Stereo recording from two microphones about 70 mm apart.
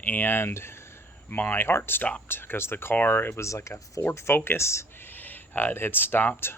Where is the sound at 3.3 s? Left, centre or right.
Left.